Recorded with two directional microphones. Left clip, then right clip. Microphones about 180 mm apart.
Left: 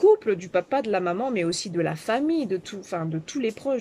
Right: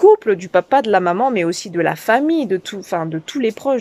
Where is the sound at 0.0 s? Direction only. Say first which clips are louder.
Right 8 dB; 10° left (ahead or behind).